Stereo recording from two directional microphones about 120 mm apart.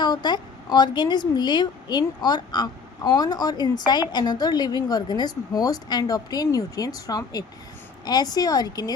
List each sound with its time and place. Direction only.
0.0 s a woman's voice: 35° left (ahead or behind)